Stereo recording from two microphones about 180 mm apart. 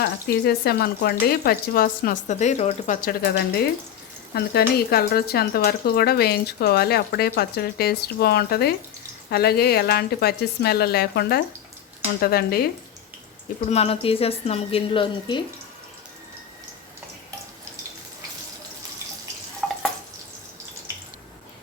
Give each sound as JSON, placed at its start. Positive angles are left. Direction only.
{"t": 0.0, "sound": "speech", "side_deg": 60}
{"t": 13.7, "sound": "a woman's voice", "side_deg": 35}
{"t": 19.6, "sound": "drip", "side_deg": 0}